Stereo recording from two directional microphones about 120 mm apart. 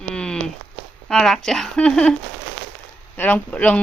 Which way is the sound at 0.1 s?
5° left (ahead or behind).